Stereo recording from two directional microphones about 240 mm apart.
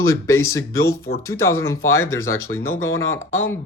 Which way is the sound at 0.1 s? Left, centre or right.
Centre.